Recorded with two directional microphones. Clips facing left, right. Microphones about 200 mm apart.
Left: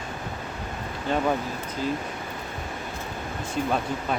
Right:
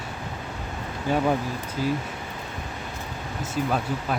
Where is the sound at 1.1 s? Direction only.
10° right (ahead or behind).